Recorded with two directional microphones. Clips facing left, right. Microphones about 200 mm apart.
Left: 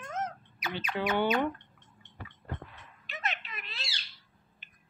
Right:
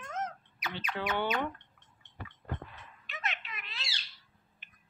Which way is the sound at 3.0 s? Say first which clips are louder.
Left 3 dB; 35° left (ahead or behind).